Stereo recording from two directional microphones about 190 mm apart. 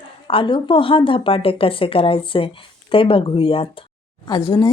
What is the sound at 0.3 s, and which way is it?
A woman's voice, 25° left (ahead or behind).